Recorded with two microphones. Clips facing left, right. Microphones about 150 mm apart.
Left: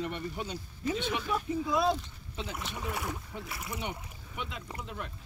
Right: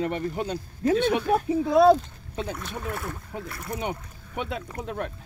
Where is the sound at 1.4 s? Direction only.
70° right (ahead or behind).